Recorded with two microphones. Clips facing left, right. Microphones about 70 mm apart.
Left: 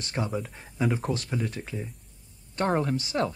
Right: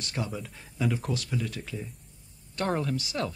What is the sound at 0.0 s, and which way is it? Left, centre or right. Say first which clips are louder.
Speech: left 4 dB; left.